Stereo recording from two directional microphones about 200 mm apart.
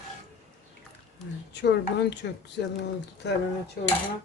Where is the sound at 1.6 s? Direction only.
60° left (ahead or behind).